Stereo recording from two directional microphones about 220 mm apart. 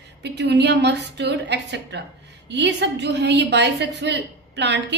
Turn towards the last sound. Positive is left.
turn(degrees=-50)  # may be behind; listen again after turning